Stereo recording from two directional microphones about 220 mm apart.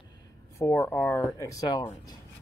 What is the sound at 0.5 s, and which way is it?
Speech, 10° left (ahead or behind).